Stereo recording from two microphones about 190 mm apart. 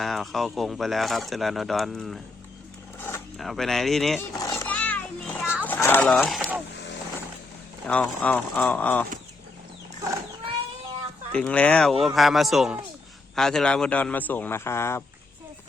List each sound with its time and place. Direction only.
0.0 s speech: centre (ahead or behind)
3.3 s speech: centre (ahead or behind)
4.2 s children playing: 15° left (ahead or behind)
5.6 s speech: 10° left (ahead or behind)
7.9 s speech: 5° left (ahead or behind)
11.3 s speech: 5° left (ahead or behind)